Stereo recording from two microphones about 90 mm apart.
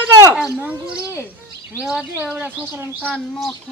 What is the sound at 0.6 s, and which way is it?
Speech, 15° right (ahead or behind).